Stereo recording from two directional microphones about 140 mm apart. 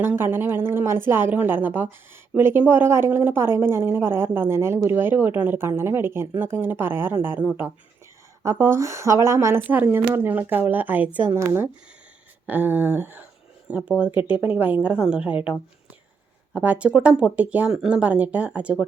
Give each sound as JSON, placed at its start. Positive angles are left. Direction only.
{"t": 0.0, "sound": "a woman's voice", "side_deg": -15}
{"t": 16.6, "sound": "a woman's voice", "side_deg": -10}